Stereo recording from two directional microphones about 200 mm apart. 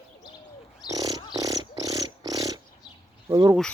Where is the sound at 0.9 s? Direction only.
20° right (ahead or behind).